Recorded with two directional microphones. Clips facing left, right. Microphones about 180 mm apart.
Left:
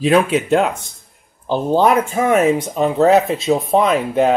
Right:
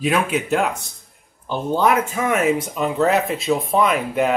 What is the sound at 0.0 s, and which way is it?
Speech, 30° left (ahead or behind).